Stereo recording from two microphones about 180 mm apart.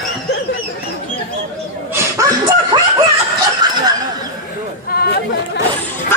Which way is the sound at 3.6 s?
25° right (ahead or behind).